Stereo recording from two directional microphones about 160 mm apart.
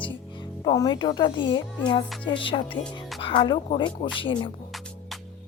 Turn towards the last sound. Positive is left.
turn(degrees=30)  # may be behind; listen again after turning